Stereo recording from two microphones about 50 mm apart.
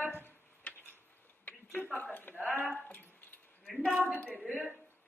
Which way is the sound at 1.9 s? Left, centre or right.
Left.